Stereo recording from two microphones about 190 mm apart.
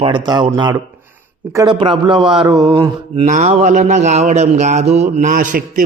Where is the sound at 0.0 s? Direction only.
25° right (ahead or behind).